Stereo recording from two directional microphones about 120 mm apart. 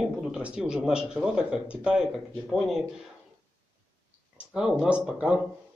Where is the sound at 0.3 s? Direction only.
5° right (ahead or behind).